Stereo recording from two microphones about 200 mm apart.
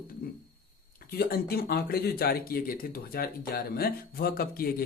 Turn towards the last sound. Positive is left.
turn(degrees=50)  # may be behind; listen again after turning